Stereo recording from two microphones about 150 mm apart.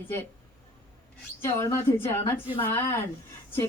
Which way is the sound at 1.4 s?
20° left (ahead or behind).